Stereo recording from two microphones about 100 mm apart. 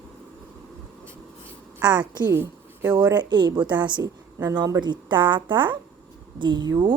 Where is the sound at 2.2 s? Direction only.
25° right (ahead or behind).